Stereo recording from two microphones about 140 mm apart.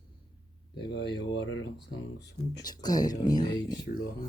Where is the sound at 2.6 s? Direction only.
30° left (ahead or behind).